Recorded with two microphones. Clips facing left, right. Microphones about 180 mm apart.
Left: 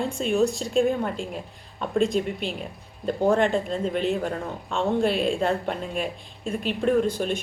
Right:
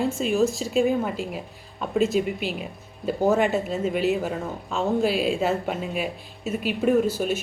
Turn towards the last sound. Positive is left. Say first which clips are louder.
# right 1 dB
turn(degrees=-5)  # may be behind; listen again after turning